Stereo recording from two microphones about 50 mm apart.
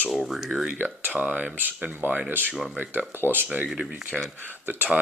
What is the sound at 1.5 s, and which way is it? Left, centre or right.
Speech, right.